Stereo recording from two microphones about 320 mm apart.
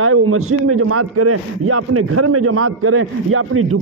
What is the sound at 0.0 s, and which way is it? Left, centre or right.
A man's voice, right.